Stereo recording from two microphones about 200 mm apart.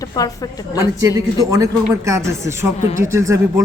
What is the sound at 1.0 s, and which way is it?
Speech, 15° right (ahead or behind).